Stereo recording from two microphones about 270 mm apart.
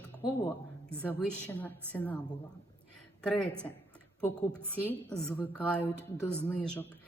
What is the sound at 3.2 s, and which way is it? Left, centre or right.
A woman's voice, centre.